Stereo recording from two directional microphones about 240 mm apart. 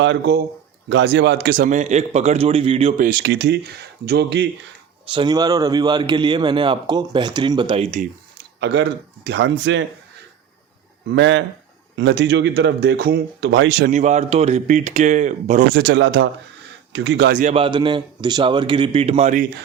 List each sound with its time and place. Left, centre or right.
0.0 s a man's voice: right
3.1 s speech: right
5.0 s a man's voice: centre
8.6 s speech: right
11.1 s speech: right
13.9 s a man's voice: right
15.7 s speech: right
17.4 s a man's voice: right